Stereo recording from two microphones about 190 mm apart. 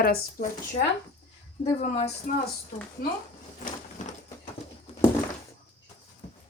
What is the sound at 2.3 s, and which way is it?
Speech, 45° left (ahead or behind).